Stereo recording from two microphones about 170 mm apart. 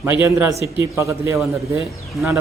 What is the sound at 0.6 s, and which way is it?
Speech, 15° right (ahead or behind).